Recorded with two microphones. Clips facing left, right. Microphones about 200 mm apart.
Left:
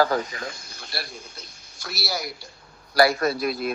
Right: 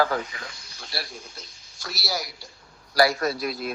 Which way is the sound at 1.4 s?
60° left (ahead or behind).